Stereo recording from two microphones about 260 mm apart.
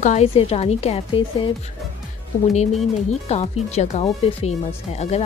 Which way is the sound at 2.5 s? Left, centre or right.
Left.